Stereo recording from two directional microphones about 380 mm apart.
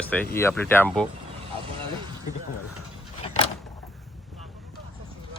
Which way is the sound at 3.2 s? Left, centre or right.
Centre.